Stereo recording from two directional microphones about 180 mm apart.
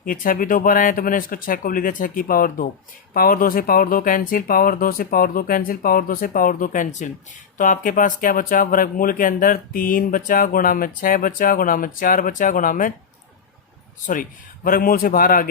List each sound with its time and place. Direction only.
0.0 s speech: 50° left (ahead or behind)
14.1 s speech: 50° left (ahead or behind)